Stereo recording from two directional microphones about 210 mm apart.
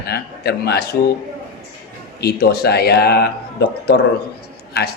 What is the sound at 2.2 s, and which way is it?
A man's voice, 50° left (ahead or behind).